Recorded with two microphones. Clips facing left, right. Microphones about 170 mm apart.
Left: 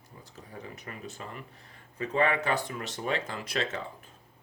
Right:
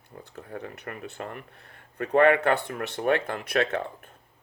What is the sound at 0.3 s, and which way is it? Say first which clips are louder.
Speech: right 6 dB; 60° right (ahead or behind).